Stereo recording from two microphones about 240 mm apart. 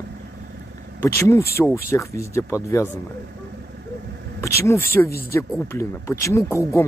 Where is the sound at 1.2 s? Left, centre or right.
Centre.